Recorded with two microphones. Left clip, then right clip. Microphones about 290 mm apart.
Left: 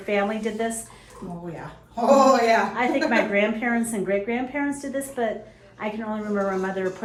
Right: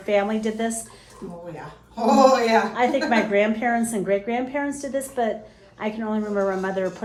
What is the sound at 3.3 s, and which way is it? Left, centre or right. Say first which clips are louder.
Cutlery: right 2 dB; right.